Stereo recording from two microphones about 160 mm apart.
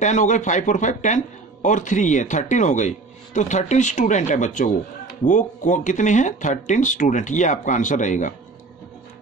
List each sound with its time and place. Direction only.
0.0 s speech: 50° left (ahead or behind)